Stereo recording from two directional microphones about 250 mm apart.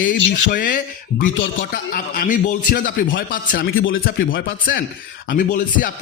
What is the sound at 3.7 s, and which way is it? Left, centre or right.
Speech, left.